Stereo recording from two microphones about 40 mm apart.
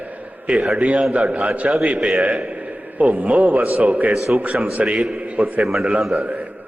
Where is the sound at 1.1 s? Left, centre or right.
Right.